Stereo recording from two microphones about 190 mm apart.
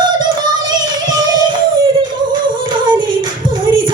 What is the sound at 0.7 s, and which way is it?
Music, 20° right (ahead or behind).